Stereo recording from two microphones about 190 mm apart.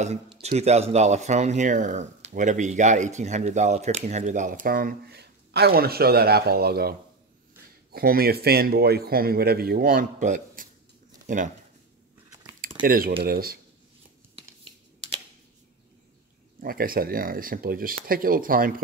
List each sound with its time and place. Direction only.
0.0 s speech: 35° right (ahead or behind)
12.8 s speech: 50° right (ahead or behind)
16.5 s speech: 50° right (ahead or behind)